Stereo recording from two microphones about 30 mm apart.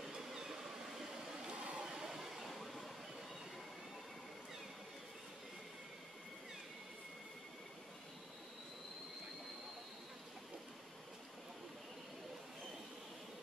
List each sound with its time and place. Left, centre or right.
0.1 s train: centre
1.5 s waves: right
1.9 s train: centre